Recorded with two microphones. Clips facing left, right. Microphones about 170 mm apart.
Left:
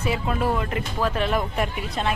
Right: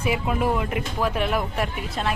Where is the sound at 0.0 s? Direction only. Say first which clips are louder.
Right 1 dB; 10° right (ahead or behind).